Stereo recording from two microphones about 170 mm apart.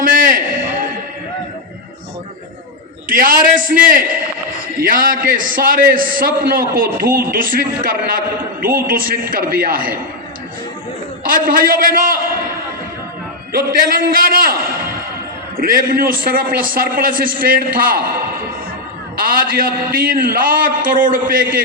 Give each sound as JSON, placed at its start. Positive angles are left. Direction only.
{"t": 0.0, "sound": "a sound", "side_deg": -50}
{"t": 3.1, "sound": "a man's voice", "side_deg": -55}
{"t": 11.3, "sound": "a man's voice", "side_deg": -55}
{"t": 13.5, "sound": "a man's voice", "side_deg": -55}
{"t": 19.2, "sound": "a man's voice", "side_deg": -55}